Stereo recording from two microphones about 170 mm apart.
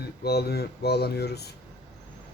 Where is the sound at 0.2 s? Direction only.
70° left (ahead or behind).